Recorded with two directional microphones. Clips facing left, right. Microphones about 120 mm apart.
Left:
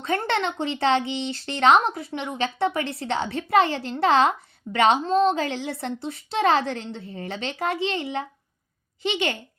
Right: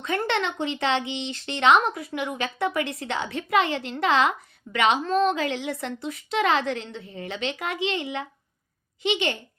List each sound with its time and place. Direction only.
0.0 s speech: 35° left (ahead or behind)